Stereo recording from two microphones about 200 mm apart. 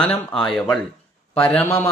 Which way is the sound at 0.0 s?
5° left (ahead or behind).